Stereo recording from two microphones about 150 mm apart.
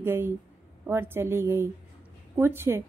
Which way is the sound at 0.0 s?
15° right (ahead or behind).